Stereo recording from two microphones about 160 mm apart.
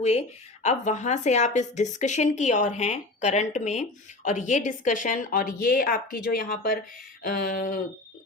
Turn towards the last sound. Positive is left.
turn(degrees=60)  # may be behind; listen again after turning